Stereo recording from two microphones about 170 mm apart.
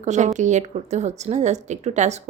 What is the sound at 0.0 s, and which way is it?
Speech, 45° right (ahead or behind).